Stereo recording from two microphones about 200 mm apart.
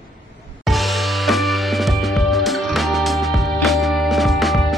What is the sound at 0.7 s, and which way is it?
Music, centre (ahead or behind).